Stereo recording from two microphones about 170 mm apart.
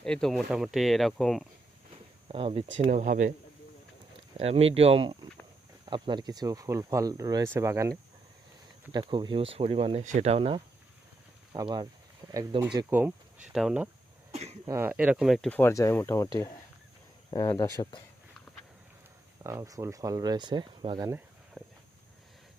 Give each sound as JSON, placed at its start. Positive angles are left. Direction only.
{"t": 0.0, "sound": "speech", "side_deg": 5}
{"t": 2.2, "sound": "speech", "side_deg": -30}
{"t": 2.8, "sound": "speech", "side_deg": -50}
{"t": 4.4, "sound": "speech", "side_deg": -35}
{"t": 8.9, "sound": "speech", "side_deg": -25}
{"t": 11.5, "sound": "speech", "side_deg": -25}
{"t": 12.9, "sound": "speech", "side_deg": -10}
{"t": 17.3, "sound": "speech", "side_deg": 20}
{"t": 19.4, "sound": "speech", "side_deg": -20}
{"t": 21.6, "sound": "a sound", "side_deg": 5}